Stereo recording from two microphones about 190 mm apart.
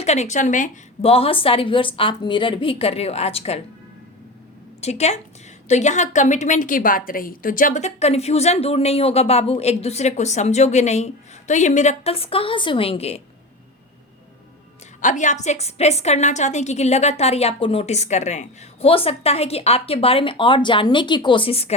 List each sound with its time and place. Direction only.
0.0 s a woman's voice: 35° left (ahead or behind)
4.8 s a woman's voice: 35° left (ahead or behind)
15.0 s a woman's voice: 40° left (ahead or behind)